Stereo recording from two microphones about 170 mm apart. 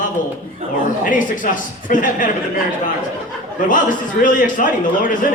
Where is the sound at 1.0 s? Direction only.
50° left (ahead or behind).